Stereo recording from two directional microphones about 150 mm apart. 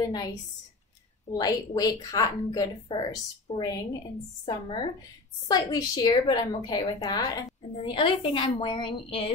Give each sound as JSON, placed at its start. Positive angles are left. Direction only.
{"t": 0.0, "sound": "a woman's voice", "side_deg": 25}